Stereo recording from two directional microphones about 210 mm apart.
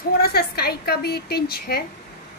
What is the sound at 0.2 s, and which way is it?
A woman's voice, 50° left (ahead or behind).